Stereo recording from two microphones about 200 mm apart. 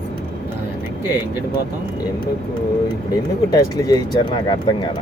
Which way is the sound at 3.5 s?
20° left (ahead or behind).